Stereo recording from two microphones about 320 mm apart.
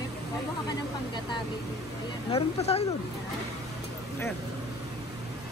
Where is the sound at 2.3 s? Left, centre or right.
Centre.